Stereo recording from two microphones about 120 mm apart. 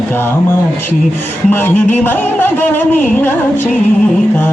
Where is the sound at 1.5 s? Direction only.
15° left (ahead or behind).